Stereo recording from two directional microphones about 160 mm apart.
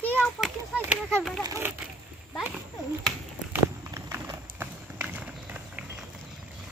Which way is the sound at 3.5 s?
15° right (ahead or behind).